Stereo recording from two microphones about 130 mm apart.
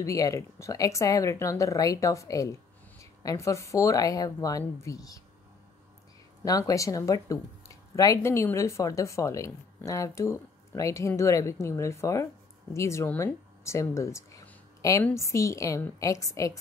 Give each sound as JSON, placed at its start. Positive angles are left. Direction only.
{"t": 0.0, "sound": "speech", "side_deg": 25}
{"t": 6.4, "sound": "a woman's voice", "side_deg": 25}